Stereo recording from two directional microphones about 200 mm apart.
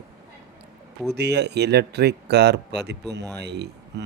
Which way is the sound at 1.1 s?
55° right (ahead or behind).